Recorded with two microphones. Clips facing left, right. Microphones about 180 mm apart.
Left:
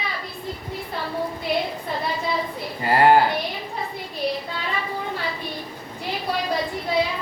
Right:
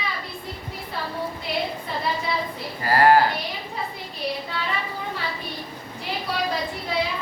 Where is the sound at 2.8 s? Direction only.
20° left (ahead or behind).